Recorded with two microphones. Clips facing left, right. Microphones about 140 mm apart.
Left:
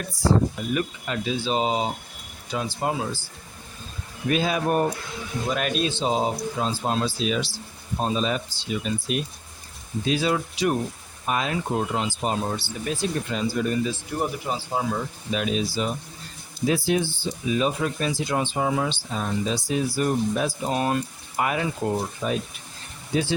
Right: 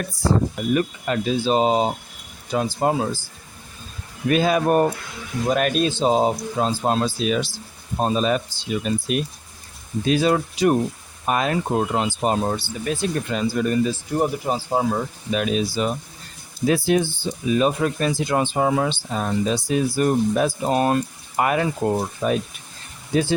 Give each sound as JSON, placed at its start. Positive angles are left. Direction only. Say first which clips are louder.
{"t": 0.3, "sound": "speech", "louder": "right 2 dB", "side_deg": -45}
{"t": 4.3, "sound": "speech", "louder": "right 5 dB", "side_deg": -55}
{"t": 14.2, "sound": "speech", "louder": "right 6 dB", "side_deg": -35}